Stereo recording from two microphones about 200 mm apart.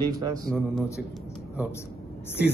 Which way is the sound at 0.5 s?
Centre (ahead or behind).